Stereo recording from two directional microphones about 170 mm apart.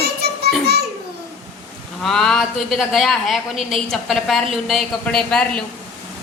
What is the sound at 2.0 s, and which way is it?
A woman's voice, 5° left (ahead or behind).